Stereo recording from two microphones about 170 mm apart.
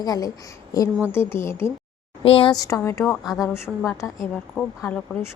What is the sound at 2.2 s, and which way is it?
A woman's voice, 35° left (ahead or behind).